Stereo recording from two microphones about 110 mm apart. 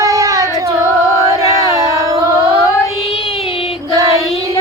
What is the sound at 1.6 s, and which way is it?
Crowd, 30° right (ahead or behind).